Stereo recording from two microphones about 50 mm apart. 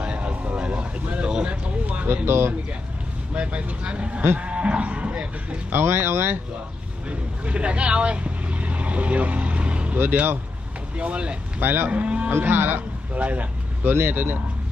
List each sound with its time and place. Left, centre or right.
0.0 s vehicle: right
2.2 s speech: right
3.3 s speech: right
4.4 s livestock: right
5.7 s speech: right
7.1 s speech: right
11.6 s speech: right
11.9 s speech: right
12.3 s speech: right
13.1 s speech: right
13.9 s speech: right